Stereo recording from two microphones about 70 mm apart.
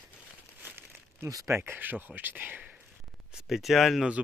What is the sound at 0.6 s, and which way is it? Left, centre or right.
Crumpling, right.